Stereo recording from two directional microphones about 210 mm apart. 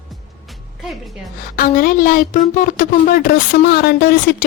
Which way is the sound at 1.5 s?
40° left (ahead or behind).